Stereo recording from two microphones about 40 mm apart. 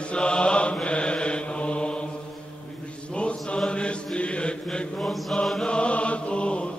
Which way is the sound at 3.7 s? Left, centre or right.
Left.